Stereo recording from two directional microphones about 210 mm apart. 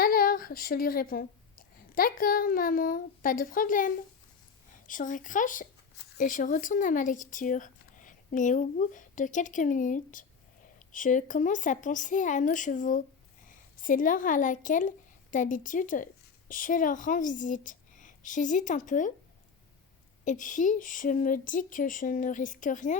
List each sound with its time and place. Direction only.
0.0 s a sound: 45° left (ahead or behind)
2.0 s a woman's voice: 40° left (ahead or behind)
20.2 s speech: 35° left (ahead or behind)